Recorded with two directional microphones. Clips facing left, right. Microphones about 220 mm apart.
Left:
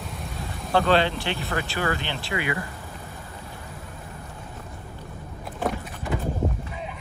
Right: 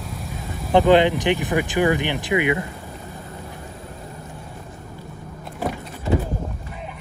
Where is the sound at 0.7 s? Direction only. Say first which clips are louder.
Right 6 dB; 15° right (ahead or behind).